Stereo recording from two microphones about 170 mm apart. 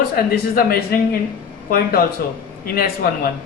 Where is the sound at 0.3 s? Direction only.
60° left (ahead or behind).